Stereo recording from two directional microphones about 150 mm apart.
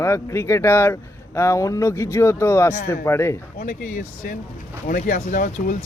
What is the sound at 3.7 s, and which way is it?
Speech, 65° left (ahead or behind).